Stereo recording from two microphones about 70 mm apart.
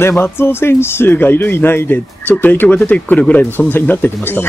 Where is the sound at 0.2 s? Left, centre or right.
Left.